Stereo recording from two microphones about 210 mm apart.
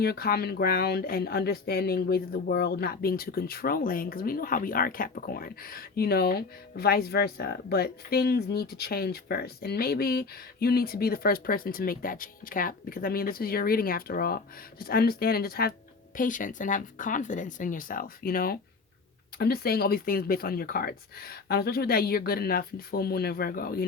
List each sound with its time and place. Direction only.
0.0 s speech: 50° left (ahead or behind)